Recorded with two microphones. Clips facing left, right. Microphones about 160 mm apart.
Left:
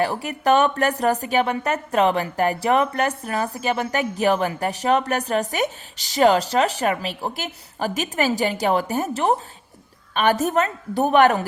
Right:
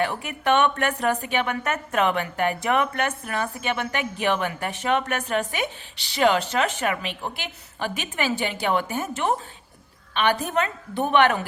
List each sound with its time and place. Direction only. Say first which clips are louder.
0.0 s a woman's voice: left 3 dB; 35° left (ahead or behind)